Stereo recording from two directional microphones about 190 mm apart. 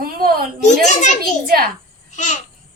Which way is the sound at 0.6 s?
40° left (ahead or behind).